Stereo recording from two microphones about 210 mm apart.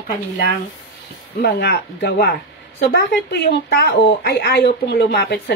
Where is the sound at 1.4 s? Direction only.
50° left (ahead or behind).